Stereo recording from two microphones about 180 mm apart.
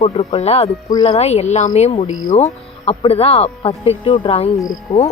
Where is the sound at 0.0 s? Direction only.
35° left (ahead or behind).